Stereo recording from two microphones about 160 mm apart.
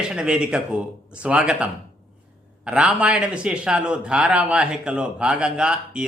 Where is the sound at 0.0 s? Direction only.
5° right (ahead or behind).